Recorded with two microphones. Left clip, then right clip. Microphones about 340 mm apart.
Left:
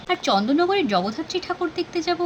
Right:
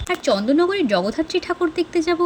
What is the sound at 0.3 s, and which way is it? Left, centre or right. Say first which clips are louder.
Speech: right 2 dB; centre.